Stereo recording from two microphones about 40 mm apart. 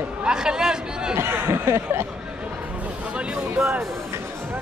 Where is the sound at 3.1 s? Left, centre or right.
Right.